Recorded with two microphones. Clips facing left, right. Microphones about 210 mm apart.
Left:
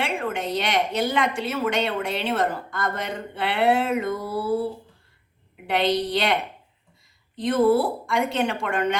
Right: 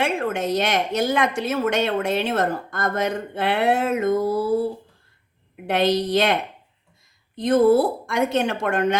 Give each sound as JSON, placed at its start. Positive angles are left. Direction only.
{"t": 0.0, "sound": "a woman's voice", "side_deg": -45}
{"t": 5.6, "sound": "a woman's voice", "side_deg": -45}
{"t": 7.4, "sound": "a woman's voice", "side_deg": -45}